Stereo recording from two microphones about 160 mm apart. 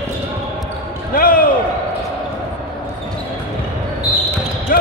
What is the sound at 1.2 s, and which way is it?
Basketball bounce, 60° left (ahead or behind).